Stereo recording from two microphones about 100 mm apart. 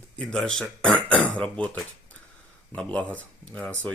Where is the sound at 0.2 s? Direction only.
10° left (ahead or behind).